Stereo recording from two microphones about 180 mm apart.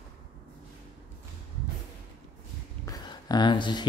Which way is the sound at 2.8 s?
20° left (ahead or behind).